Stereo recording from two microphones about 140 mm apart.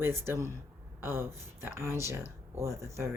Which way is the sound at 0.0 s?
15° right (ahead or behind).